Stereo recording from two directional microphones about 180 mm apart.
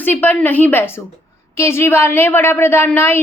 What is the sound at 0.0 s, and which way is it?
A woman's voice, 10° left (ahead or behind).